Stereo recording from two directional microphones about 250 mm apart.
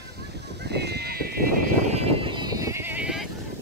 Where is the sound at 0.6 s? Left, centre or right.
Right; by 3.3 s centre.